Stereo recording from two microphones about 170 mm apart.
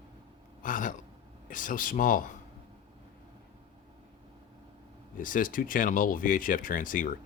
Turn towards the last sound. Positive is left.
turn(degrees=55)  # may be behind; listen again after turning